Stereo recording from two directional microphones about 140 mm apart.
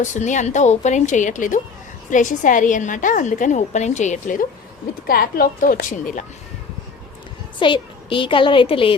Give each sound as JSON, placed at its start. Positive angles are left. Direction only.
{"t": 0.0, "sound": "a woman's voice", "side_deg": 60}
{"t": 5.0, "sound": "speech", "side_deg": 90}
{"t": 7.6, "sound": "a woman's voice", "side_deg": 35}